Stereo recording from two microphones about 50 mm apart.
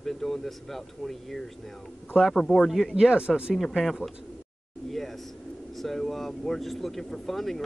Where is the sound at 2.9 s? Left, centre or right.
Centre.